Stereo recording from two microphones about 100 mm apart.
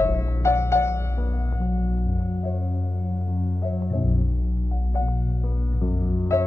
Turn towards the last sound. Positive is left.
turn(degrees=30)  # may be behind; listen again after turning